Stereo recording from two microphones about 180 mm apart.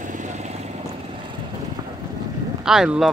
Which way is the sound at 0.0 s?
45° right (ahead or behind).